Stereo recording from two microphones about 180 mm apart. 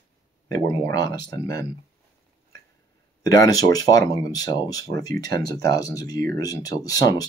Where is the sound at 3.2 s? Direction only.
20° left (ahead or behind).